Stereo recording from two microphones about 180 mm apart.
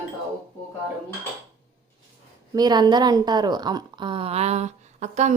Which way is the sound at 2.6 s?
20° right (ahead or behind).